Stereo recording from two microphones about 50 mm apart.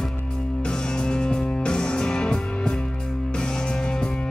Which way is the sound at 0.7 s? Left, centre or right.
Centre.